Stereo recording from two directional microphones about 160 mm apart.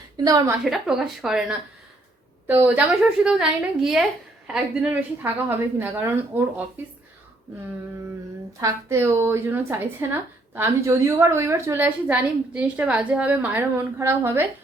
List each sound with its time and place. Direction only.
0.3 s a woman's voice: 25° right (ahead or behind)
0.6 s a woman's voice: centre (ahead or behind)
8.6 s a woman's voice: 15° right (ahead or behind)